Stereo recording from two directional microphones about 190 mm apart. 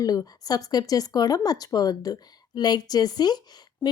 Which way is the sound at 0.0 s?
20° left (ahead or behind).